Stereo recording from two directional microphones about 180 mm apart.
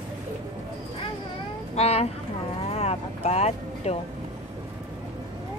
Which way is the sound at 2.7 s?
35° left (ahead or behind).